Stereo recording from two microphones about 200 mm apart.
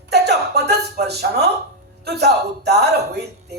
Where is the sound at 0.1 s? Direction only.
55° right (ahead or behind).